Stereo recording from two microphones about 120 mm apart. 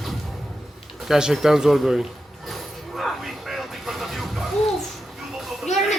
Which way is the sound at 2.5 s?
Centre (ahead or behind).